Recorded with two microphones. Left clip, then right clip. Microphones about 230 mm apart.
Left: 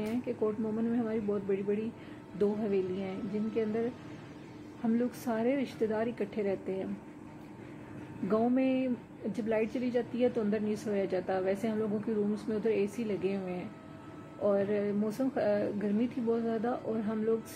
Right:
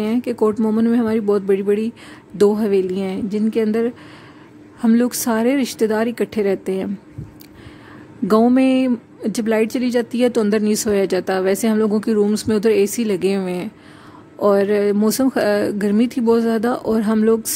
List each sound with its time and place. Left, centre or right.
0.0 s speech: right
4.8 s speech: right
8.3 s speech: right